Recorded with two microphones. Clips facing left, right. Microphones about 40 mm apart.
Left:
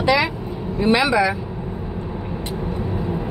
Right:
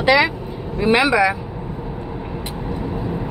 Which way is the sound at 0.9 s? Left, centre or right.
Right.